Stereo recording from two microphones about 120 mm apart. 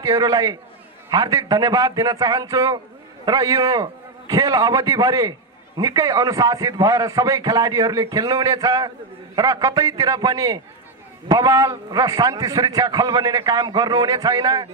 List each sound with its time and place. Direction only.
0.0 s a man's voice: 30° right (ahead or behind)